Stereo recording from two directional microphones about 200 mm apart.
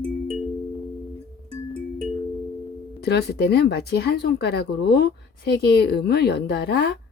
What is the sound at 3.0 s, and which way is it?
Speech, 55° left (ahead or behind).